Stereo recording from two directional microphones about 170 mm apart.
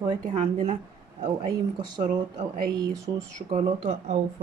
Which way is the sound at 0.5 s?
40° right (ahead or behind).